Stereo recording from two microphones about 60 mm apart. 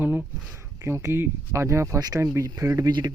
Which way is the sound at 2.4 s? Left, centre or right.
Right.